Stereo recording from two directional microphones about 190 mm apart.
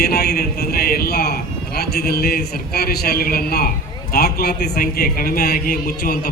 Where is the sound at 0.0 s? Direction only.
55° left (ahead or behind).